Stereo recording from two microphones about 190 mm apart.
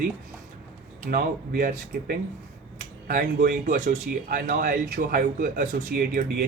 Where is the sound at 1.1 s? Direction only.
50° right (ahead or behind).